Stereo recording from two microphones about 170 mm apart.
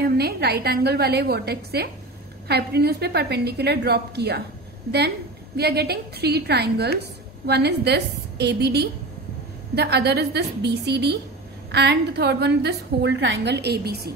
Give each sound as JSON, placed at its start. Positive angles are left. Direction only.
{"t": 0.0, "sound": "a woman's voice", "side_deg": -70}
{"t": 5.6, "sound": "a woman's voice", "side_deg": -70}